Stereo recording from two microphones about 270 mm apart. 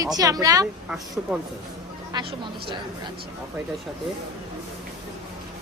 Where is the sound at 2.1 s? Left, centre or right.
Centre.